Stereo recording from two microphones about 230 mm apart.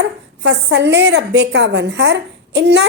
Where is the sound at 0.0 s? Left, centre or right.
Right.